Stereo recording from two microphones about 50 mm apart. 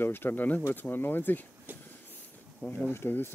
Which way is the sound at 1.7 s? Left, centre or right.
Right.